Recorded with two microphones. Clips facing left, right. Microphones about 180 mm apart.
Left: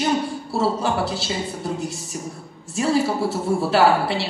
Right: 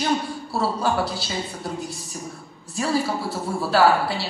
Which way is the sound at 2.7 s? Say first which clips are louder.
Left 3 dB; 25° left (ahead or behind).